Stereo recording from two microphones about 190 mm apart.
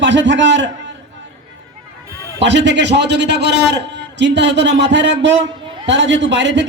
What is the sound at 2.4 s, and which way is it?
A man's voice, 65° right (ahead or behind).